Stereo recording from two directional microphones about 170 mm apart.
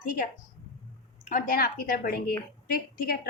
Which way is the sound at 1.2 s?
50° left (ahead or behind).